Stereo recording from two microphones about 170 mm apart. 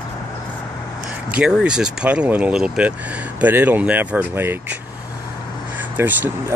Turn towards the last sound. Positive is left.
turn(degrees=-10)  # may be behind; listen again after turning